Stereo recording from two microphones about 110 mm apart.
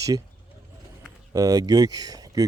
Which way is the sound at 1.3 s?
35° right (ahead or behind).